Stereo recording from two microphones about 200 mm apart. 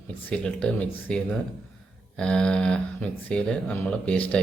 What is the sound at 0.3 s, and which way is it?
Speech, 5° left (ahead or behind).